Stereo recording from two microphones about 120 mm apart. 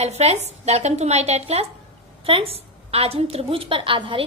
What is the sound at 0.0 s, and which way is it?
A woman's voice, 65° right (ahead or behind).